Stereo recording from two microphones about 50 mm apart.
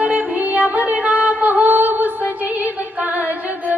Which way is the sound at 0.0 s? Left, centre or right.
Right.